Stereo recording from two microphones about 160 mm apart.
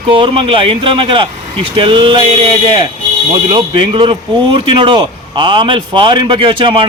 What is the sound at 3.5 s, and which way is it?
Speech, 30° right (ahead or behind).